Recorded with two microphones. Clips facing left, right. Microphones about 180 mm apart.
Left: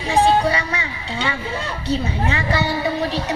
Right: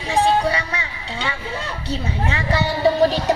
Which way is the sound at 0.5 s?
35° right (ahead or behind).